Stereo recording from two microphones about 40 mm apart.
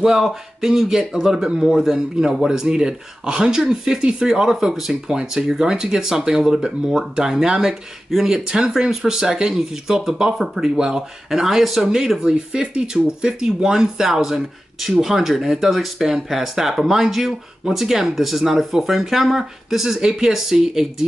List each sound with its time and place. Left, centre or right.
0.0 s speech: centre
8.5 s speech: right